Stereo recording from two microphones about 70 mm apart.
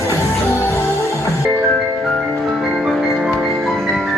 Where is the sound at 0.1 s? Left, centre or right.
Left.